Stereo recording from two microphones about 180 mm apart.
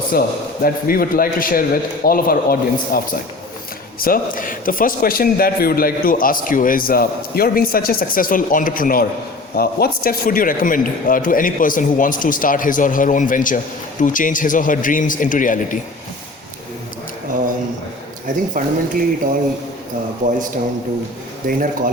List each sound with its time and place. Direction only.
0.1 s a man's voice: 55° left (ahead or behind)
4.0 s a man's voice: 50° left (ahead or behind)
18.5 s speech: 50° right (ahead or behind)
21.4 s speech: 50° right (ahead or behind)